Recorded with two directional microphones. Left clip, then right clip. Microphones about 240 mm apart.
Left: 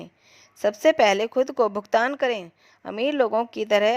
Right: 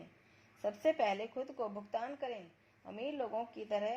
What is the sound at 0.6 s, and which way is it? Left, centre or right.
A woman's voice, left.